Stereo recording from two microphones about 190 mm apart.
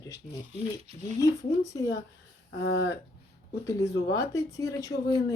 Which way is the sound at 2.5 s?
60° left (ahead or behind).